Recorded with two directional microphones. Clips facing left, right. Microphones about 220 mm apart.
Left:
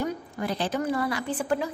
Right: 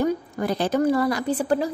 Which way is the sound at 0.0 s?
45° right (ahead or behind).